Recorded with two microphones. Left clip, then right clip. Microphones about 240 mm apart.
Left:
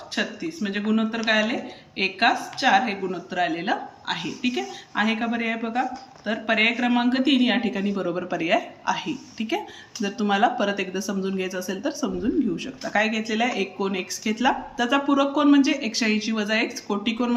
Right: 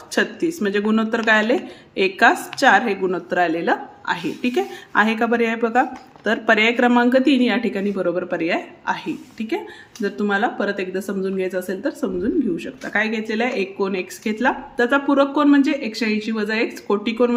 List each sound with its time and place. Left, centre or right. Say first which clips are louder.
0.1 s a woman's voice: right 8 dB; right